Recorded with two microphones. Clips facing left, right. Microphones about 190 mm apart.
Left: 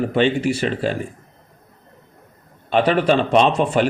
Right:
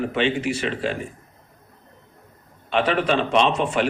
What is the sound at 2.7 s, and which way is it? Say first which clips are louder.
A man's voice: left 4 dB; 40° left (ahead or behind).